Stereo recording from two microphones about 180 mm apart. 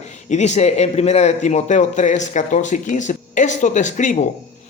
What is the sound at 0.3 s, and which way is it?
A man's voice, 40° left (ahead or behind).